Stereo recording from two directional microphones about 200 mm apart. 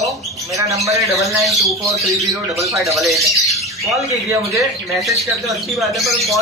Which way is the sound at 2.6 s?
15° right (ahead or behind).